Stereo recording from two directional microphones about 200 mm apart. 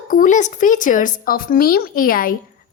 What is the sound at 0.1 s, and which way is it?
A woman's voice, 40° left (ahead or behind).